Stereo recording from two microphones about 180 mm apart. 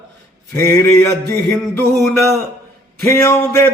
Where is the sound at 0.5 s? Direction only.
15° left (ahead or behind).